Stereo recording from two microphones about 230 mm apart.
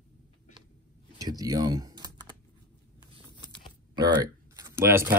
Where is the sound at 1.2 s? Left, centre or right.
Centre.